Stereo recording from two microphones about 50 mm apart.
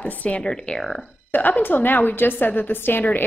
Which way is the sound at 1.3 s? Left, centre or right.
Left.